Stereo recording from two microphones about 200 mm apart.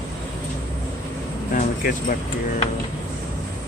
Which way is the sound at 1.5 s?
40° left (ahead or behind).